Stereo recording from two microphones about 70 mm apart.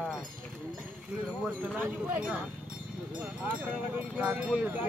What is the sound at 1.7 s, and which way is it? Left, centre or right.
Speech, right.